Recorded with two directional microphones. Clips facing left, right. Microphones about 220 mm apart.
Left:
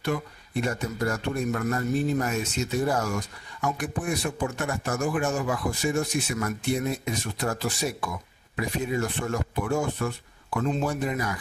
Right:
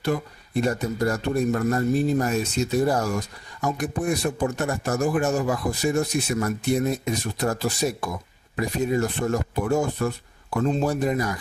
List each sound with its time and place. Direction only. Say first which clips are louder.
0.0 s a man's voice: right 3 dB; 35° right (ahead or behind)